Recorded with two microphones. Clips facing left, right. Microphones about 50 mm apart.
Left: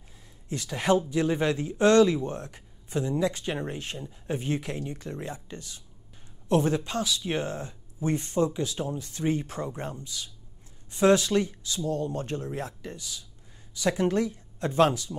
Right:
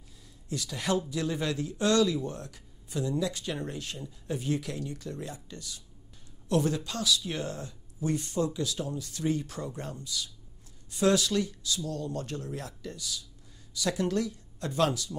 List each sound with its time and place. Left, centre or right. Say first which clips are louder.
0.5 s speech: left 6 dB; left